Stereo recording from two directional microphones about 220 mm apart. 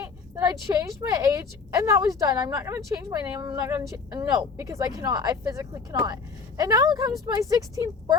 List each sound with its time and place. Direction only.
0.0 s a woman's voice: 15° right (ahead or behind)